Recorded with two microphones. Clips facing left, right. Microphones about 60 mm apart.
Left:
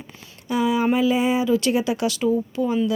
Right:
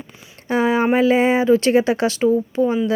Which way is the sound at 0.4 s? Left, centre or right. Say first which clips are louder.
Right 3 dB; right.